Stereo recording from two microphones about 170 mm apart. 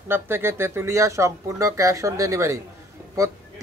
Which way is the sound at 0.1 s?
15° right (ahead or behind).